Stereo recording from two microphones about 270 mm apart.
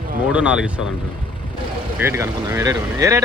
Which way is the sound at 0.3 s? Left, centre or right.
Centre.